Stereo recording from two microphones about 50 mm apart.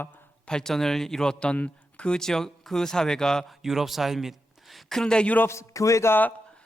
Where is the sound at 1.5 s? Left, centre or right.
Left.